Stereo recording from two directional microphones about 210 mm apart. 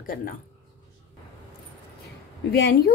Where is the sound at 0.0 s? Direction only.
45° left (ahead or behind).